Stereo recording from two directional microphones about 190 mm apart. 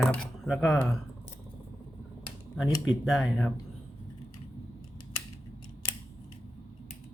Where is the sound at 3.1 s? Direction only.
Centre (ahead or behind).